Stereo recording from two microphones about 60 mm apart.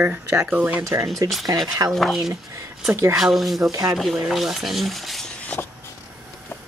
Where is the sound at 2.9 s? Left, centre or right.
Right.